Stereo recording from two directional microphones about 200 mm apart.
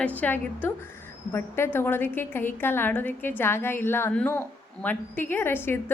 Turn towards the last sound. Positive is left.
turn(degrees=10)  # may be behind; listen again after turning